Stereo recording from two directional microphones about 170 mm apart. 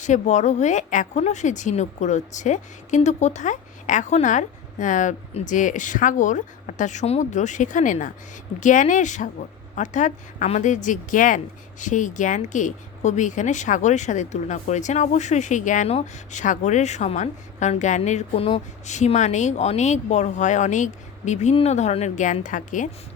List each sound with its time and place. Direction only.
0.0 s a woman's voice: 45° left (ahead or behind)